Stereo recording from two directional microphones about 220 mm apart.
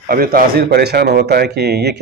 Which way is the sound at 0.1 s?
40° right (ahead or behind).